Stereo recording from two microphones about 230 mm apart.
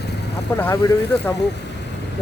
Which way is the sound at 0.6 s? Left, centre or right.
Centre.